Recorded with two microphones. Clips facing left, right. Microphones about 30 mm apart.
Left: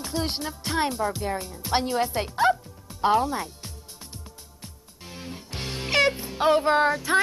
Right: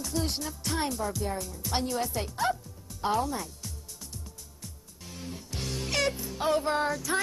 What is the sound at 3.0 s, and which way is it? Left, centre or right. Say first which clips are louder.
Speech: left 7 dB; left.